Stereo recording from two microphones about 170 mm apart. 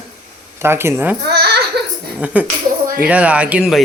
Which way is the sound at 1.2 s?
70° right (ahead or behind).